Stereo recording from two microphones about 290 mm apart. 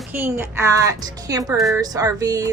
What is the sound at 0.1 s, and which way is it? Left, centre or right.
A woman's voice, centre.